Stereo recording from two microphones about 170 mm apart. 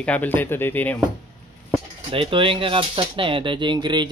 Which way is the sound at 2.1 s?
30° right (ahead or behind).